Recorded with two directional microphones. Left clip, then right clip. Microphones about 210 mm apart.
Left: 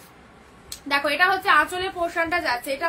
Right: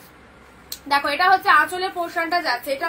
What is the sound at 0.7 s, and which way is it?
A woman's voice, 15° left (ahead or behind).